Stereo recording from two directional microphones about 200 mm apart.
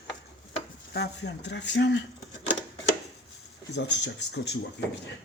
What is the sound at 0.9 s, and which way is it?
Speech, 55° left (ahead or behind).